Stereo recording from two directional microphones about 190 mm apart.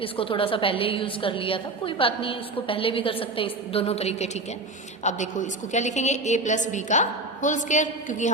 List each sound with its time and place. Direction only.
0.0 s a woman's voice: 30° left (ahead or behind)